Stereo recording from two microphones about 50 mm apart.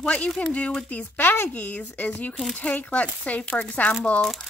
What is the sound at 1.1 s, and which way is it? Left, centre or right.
Speech, left.